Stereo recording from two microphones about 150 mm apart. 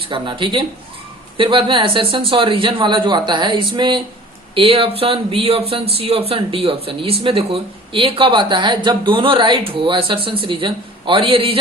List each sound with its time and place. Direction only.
0.1 s speech: 35° right (ahead or behind)